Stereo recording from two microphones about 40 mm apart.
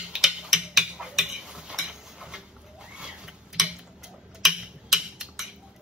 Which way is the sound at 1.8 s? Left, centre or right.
Right.